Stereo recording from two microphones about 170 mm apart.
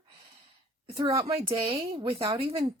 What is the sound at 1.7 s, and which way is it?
Speech, 35° right (ahead or behind).